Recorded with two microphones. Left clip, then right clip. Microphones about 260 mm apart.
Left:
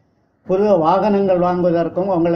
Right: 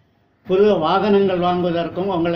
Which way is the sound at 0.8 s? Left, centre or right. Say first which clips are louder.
Left 2 dB; left.